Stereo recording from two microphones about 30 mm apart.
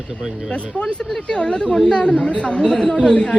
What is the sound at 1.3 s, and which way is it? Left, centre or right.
Speech, left.